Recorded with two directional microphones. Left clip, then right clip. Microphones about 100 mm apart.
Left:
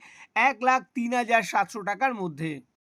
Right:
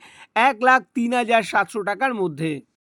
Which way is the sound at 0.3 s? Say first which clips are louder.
Right 6 dB; 50° right (ahead or behind).